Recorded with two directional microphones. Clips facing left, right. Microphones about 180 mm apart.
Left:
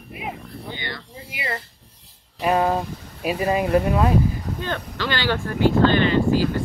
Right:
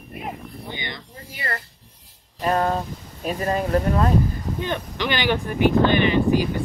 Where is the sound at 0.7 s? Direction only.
15° right (ahead or behind).